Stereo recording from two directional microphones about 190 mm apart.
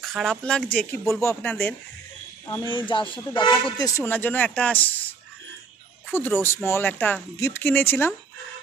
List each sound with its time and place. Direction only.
0.0 s speech: centre (ahead or behind)
2.4 s speech: 20° left (ahead or behind)
6.0 s speech: 10° left (ahead or behind)